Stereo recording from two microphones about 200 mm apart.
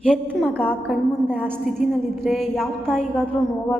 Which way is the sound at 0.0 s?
Centre (ahead or behind).